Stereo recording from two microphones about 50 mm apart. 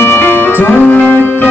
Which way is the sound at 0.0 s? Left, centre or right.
Left.